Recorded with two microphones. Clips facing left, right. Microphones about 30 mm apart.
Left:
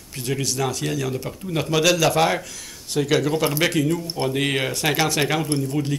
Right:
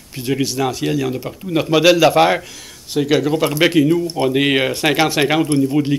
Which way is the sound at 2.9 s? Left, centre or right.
Centre.